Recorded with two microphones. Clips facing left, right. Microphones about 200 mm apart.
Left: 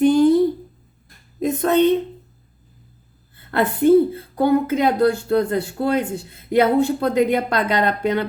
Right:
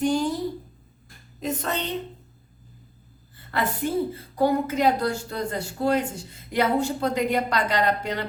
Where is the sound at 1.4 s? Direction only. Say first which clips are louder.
Left 12 dB; 50° left (ahead or behind).